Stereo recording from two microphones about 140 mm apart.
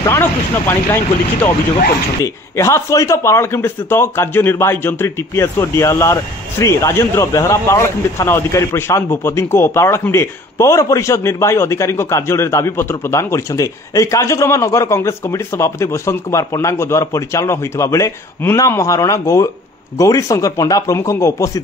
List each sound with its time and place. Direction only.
0.0 s speech: 15° left (ahead or behind)
2.2 s speech: 20° left (ahead or behind)